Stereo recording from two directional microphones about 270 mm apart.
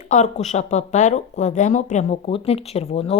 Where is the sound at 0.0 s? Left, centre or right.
Left.